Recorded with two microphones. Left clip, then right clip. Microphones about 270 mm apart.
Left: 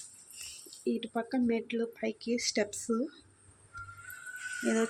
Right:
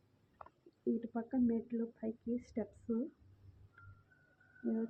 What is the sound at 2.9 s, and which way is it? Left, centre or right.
Speech, left.